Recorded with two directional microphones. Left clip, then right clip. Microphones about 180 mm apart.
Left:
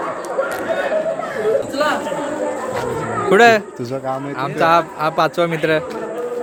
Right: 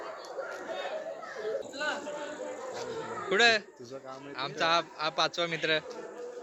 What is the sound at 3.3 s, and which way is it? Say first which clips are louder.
Speech: left 14 dB; 20° left (ahead or behind).